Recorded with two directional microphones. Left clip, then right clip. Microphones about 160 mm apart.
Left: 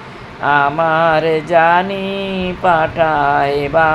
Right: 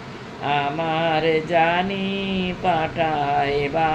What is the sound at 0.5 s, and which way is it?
Mantra, 30° left (ahead or behind).